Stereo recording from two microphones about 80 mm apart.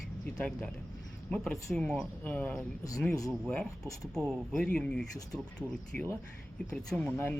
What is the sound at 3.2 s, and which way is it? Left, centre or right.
Speech, centre.